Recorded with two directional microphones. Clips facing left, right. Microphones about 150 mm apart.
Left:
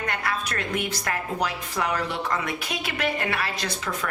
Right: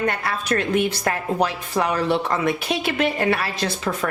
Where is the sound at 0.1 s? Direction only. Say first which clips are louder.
Right 5 dB; 30° right (ahead or behind).